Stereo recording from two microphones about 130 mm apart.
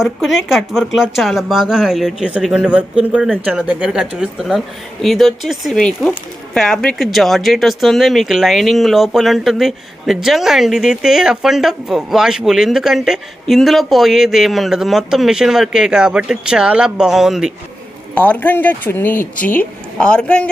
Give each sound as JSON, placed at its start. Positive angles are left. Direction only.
{"t": 0.2, "sound": "speech", "side_deg": 0}
{"t": 18.1, "sound": "speech", "side_deg": 10}